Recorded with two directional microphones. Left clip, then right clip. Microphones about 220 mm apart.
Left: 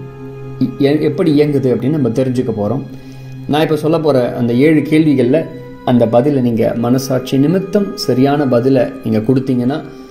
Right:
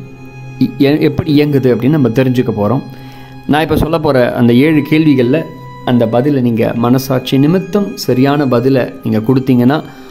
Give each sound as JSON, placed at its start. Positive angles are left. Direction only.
{"t": 0.6, "sound": "speech", "side_deg": -20}
{"t": 3.5, "sound": "speech", "side_deg": -20}